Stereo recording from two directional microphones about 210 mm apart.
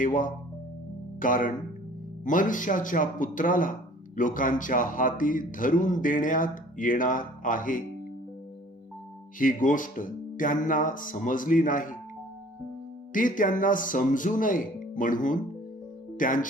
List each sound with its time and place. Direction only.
0.0 s speech: 40° left (ahead or behind)
9.4 s speech: 40° left (ahead or behind)
13.1 s speech: 40° left (ahead or behind)